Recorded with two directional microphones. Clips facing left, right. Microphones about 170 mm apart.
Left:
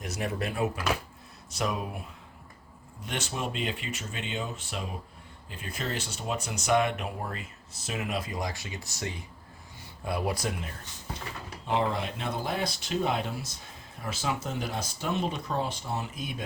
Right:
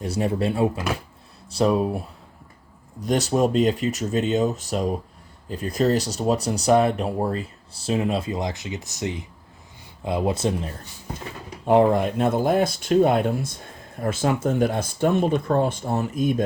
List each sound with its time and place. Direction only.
0.0 s speech: 30° right (ahead or behind)
11.6 s speech: 50° right (ahead or behind)